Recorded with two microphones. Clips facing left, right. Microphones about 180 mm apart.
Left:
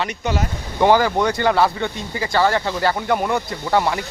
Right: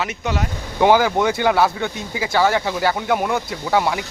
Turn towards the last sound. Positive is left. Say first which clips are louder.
# even
turn(degrees=-5)  # may be behind; listen again after turning